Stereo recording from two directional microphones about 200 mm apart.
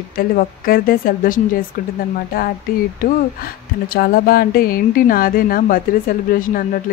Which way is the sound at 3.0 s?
45° left (ahead or behind).